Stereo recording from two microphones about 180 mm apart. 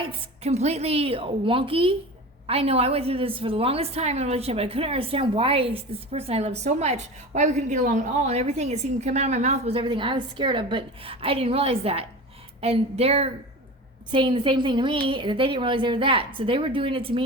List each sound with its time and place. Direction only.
0.0 s a woman's voice: 30° right (ahead or behind)